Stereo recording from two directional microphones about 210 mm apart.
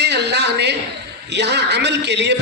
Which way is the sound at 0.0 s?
55° right (ahead or behind).